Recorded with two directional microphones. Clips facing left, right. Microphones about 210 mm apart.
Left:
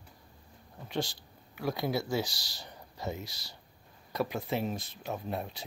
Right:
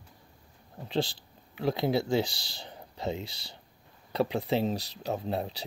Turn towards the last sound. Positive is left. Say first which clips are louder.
# right 4 dB
turn(degrees=-30)  # may be behind; listen again after turning